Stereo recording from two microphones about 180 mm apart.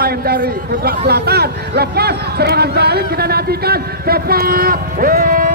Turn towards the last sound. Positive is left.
turn(degrees=-50)  # may be behind; listen again after turning